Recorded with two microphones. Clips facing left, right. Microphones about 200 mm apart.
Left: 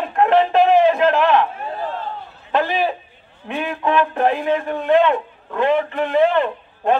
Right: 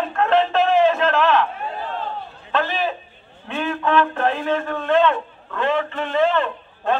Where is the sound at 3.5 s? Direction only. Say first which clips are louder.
Even; 15° left (ahead or behind).